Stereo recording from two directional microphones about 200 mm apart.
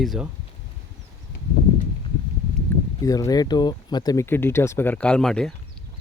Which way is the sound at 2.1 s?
25° left (ahead or behind).